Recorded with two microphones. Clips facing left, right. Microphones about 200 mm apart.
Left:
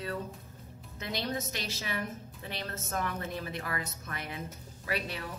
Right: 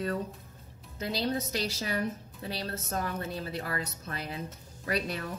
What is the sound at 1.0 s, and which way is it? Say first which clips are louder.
A woman's voice: right 4 dB; 30° right (ahead or behind).